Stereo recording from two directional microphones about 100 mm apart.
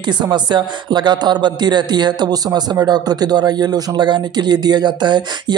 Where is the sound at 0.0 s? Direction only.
50° right (ahead or behind).